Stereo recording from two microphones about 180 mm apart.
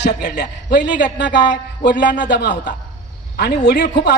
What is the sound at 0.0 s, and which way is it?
A man's voice, 70° left (ahead or behind).